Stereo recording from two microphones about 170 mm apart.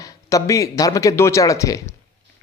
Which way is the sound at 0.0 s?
20° left (ahead or behind).